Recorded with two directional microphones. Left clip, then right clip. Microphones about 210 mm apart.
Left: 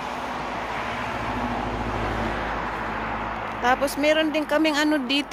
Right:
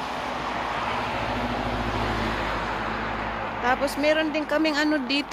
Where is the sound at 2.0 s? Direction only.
50° right (ahead or behind).